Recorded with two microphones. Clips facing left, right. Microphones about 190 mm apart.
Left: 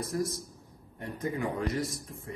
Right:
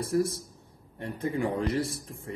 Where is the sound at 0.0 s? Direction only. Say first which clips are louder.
Right 5 dB; 30° right (ahead or behind).